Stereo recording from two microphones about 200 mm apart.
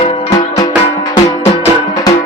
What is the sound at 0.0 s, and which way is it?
Music, 30° left (ahead or behind).